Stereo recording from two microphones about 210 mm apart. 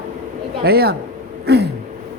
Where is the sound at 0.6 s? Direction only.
50° right (ahead or behind).